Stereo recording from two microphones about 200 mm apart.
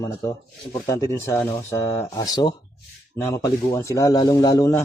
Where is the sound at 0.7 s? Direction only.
15° left (ahead or behind).